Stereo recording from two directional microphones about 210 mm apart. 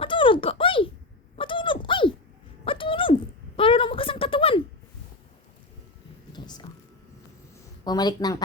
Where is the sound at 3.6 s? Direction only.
25° left (ahead or behind).